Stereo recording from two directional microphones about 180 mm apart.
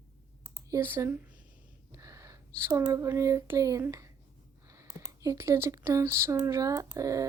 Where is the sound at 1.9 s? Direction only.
15° right (ahead or behind).